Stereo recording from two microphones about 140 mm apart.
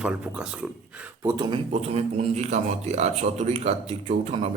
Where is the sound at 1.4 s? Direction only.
35° right (ahead or behind).